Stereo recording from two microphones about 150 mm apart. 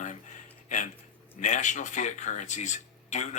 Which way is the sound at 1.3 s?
55° left (ahead or behind).